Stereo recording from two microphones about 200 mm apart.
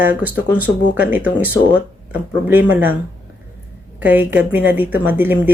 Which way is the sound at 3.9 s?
10° right (ahead or behind).